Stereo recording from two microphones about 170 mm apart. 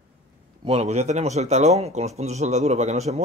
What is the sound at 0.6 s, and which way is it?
Speech, 40° right (ahead or behind).